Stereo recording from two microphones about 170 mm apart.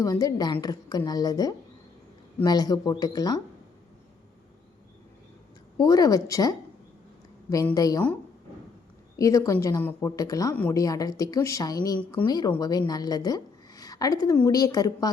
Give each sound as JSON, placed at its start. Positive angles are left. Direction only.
{"t": 0.0, "sound": "a woman's voice", "side_deg": 20}
{"t": 5.7, "sound": "a woman's voice", "side_deg": 20}
{"t": 7.5, "sound": "a woman's voice", "side_deg": 20}
{"t": 9.1, "sound": "a woman's voice", "side_deg": 20}
{"t": 10.5, "sound": "a woman's voice", "side_deg": 10}
{"t": 10.8, "sound": "a woman's voice", "side_deg": 20}